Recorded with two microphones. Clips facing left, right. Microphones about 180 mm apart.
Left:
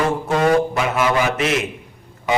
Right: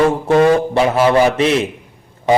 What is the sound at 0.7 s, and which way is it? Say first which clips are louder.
Speech: right 6 dB; 30° right (ahead or behind).